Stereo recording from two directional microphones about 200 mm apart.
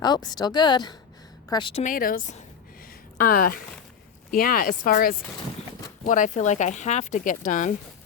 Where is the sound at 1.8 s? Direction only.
45° left (ahead or behind).